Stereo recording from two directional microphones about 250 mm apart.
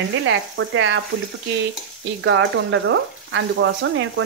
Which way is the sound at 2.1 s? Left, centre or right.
Right.